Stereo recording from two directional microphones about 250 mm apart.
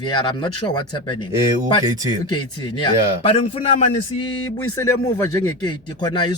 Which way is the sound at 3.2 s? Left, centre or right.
Left.